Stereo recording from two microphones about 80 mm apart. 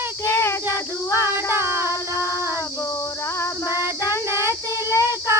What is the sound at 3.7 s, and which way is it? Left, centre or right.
Child singing, right.